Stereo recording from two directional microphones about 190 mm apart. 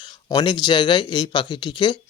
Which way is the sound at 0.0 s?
20° left (ahead or behind).